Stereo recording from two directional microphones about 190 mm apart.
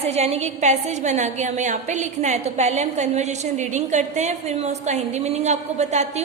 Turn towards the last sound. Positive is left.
turn(degrees=-35)  # may be behind; listen again after turning